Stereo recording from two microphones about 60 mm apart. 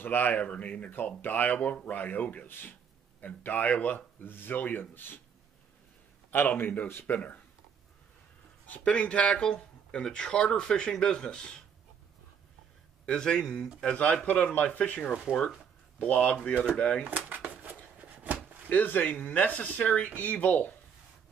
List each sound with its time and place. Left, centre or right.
0.0 s speech: left
6.3 s speech: left
8.6 s speech: left
13.0 s speech: centre
15.3 s speech: centre
16.0 s speech: left
16.6 s speech: centre
17.0 s a sound: right
18.7 s speech: left